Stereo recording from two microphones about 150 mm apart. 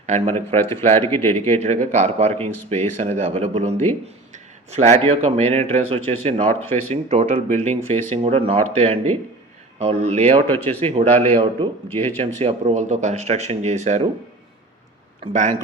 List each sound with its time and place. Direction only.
0.0 s speech: 50° right (ahead or behind)
0.5 s speech: 15° left (ahead or behind)
1.5 s speech: 50° right (ahead or behind)
6.5 s speech: 15° left (ahead or behind)
6.9 s speech: 45° right (ahead or behind)
10.4 s speech: 15° left (ahead or behind)
10.8 s speech: 45° right (ahead or behind)
11.9 s speech: 15° left (ahead or behind)
12.4 s speech: 45° right (ahead or behind)
15.3 s speech: 55° right (ahead or behind)